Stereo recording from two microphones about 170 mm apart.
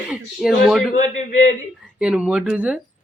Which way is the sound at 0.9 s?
45° left (ahead or behind).